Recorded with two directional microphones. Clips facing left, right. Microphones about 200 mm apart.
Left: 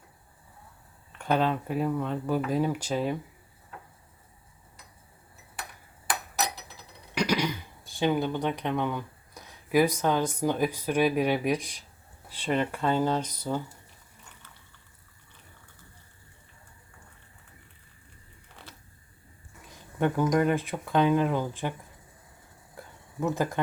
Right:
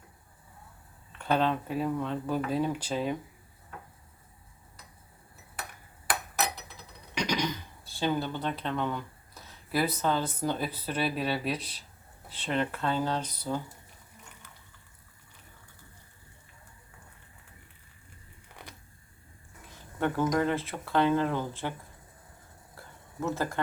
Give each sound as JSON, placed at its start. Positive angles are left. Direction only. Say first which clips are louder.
{"t": 1.2, "sound": "speech", "louder": "left 1 dB", "side_deg": 10}
{"t": 7.1, "sound": "speech", "louder": "left 3 dB", "side_deg": 10}
{"t": 20.0, "sound": "speech", "louder": "left 3 dB", "side_deg": 15}
{"t": 22.8, "sound": "a sound", "louder": "left 5 dB", "side_deg": 15}
{"t": 23.2, "sound": "speech", "louder": "left 3 dB", "side_deg": 15}